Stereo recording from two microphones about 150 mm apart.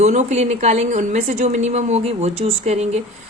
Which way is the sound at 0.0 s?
50° right (ahead or behind).